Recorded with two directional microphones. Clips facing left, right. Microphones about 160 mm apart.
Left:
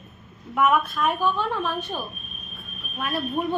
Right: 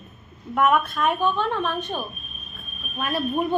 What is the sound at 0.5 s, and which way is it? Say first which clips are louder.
Speech: right 1 dB; centre (ahead or behind).